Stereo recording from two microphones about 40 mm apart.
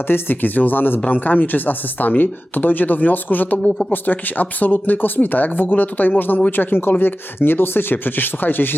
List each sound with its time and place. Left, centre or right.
0.1 s speech: left